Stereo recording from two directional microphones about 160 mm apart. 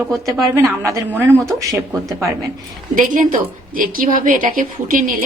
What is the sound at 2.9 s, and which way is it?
A woman's voice, 55° right (ahead or behind).